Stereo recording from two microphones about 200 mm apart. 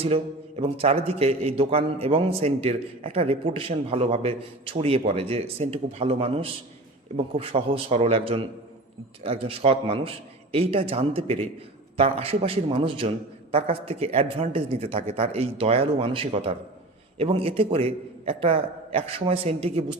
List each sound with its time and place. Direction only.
0.0 s a man's voice: 30° right (ahead or behind)